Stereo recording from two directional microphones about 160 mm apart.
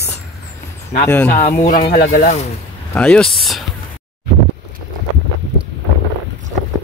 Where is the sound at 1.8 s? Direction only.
85° left.